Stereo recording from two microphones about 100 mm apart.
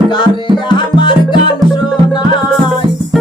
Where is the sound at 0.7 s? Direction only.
50° left (ahead or behind).